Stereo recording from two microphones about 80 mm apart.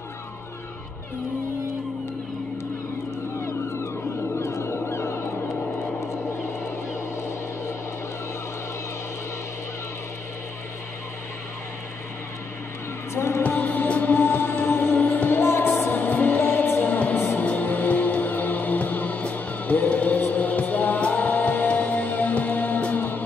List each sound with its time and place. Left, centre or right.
3.3 s vehicle: left
4.4 s music: left
6.6 s vehicle: left
13.1 s music: left
13.4 s music: left